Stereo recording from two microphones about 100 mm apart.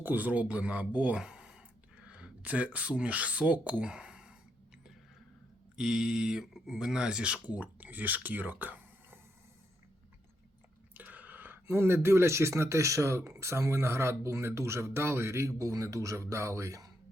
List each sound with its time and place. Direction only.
0.0 s speech: 20° right (ahead or behind)
5.7 s speech: 5° right (ahead or behind)
10.9 s speech: 15° right (ahead or behind); by 16.9 s 35° right (ahead or behind)